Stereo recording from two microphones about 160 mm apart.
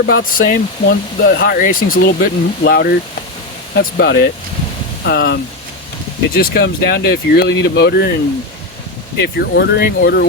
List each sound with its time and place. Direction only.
0.0 s speech: 65° left (ahead or behind)
3.8 s speech: 90° left
9.1 s speech: 90° left